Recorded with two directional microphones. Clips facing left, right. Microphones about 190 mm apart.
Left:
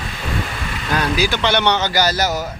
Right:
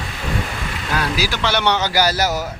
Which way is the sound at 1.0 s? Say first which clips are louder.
Left 3 dB; 5° right (ahead or behind).